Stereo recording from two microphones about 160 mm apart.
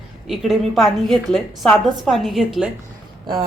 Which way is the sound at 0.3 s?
Centre (ahead or behind).